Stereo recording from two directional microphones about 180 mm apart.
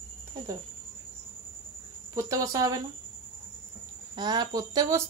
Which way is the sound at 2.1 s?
15° right (ahead or behind).